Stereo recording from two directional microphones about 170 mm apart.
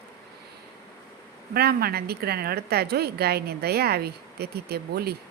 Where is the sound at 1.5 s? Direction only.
65° right (ahead or behind).